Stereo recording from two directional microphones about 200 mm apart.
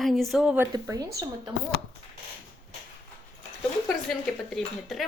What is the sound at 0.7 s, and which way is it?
Speech, 20° right (ahead or behind).